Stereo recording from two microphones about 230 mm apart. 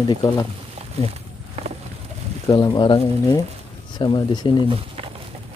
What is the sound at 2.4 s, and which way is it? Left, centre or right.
Speech, centre.